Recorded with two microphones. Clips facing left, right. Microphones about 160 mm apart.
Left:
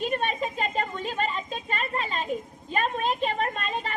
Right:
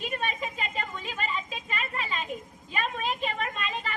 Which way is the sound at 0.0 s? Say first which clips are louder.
Left 5 dB; 40° left (ahead or behind).